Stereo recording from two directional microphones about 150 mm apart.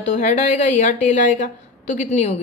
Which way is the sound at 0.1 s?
50° left (ahead or behind).